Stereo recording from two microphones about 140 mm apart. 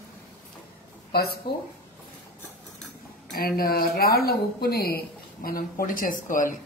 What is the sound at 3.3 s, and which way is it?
Speech, 90° left.